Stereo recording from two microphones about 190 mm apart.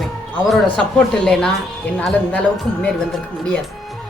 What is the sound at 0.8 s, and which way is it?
Speech, 5° left (ahead or behind).